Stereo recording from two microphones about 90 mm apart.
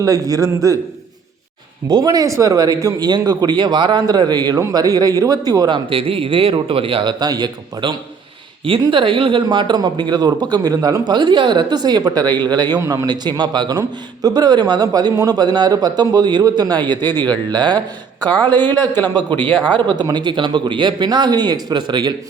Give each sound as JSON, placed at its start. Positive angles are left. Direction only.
{"t": 0.0, "sound": "a man's voice", "side_deg": -40}
{"t": 1.9, "sound": "speech", "side_deg": -45}
{"t": 5.6, "sound": "a man's voice", "side_deg": -75}
{"t": 8.8, "sound": "speech", "side_deg": -70}
{"t": 19.5, "sound": "speech", "side_deg": 15}
{"t": 19.9, "sound": "speech", "side_deg": -55}